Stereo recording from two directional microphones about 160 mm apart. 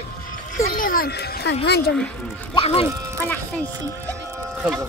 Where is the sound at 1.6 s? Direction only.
90° left.